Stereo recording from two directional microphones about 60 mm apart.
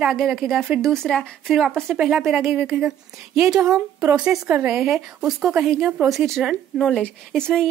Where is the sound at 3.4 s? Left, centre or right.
Centre.